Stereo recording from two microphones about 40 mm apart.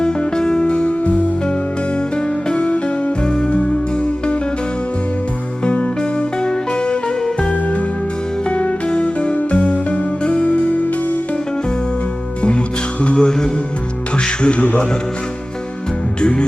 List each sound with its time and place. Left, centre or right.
0.0 s music: left
2.6 s music: left
3.2 s music: left
5.6 s music: left
6.0 s music: left
8.4 s music: left
12.4 s music: left
16.2 s music: left